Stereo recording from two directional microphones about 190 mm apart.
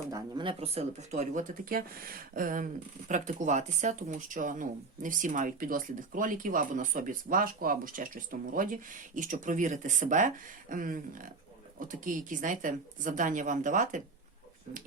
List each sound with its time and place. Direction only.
0.1 s speech: 25° right (ahead or behind); by 14.0 s 40° right (ahead or behind)